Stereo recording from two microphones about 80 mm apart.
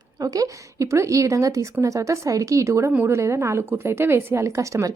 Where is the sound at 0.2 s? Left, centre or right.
Right.